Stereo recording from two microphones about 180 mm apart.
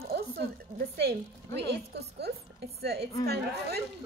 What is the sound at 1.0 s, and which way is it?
A woman's voice, 65° right (ahead or behind).